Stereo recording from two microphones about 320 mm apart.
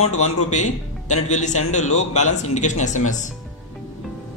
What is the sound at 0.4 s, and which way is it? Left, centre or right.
Speech, left.